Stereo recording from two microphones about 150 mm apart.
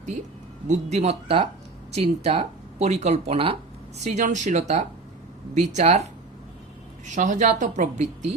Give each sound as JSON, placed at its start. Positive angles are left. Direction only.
{"t": 0.7, "sound": "speech", "side_deg": -50}
{"t": 7.1, "sound": "speech", "side_deg": -55}